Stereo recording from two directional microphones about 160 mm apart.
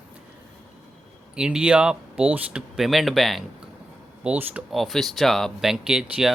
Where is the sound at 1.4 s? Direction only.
5° right (ahead or behind).